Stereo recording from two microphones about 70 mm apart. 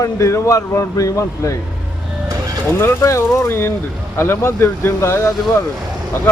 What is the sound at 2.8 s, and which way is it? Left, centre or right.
Speech, left.